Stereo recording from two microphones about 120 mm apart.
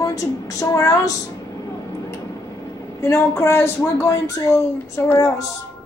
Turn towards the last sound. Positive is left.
turn(degrees=25)  # may be behind; listen again after turning